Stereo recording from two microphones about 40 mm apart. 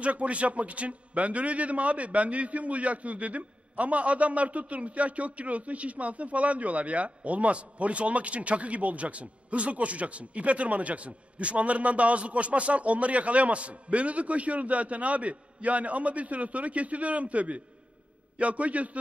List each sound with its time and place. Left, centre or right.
0.0 s a man's voice: right